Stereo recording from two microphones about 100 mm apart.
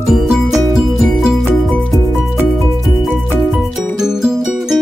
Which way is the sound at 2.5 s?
Centre (ahead or behind).